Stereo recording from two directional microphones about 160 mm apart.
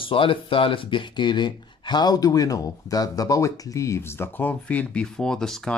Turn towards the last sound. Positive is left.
turn(degrees=5)  # may be behind; listen again after turning